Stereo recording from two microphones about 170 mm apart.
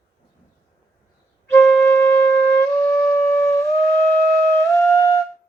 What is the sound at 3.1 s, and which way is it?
Music, 15° left (ahead or behind).